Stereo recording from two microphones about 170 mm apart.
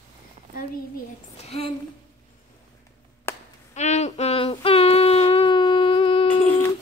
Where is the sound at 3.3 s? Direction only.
15° left (ahead or behind).